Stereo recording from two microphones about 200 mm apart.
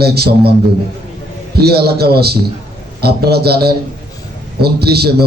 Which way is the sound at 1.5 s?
50° right (ahead or behind).